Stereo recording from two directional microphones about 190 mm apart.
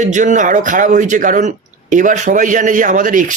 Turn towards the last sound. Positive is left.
turn(degrees=-45)  # may be behind; listen again after turning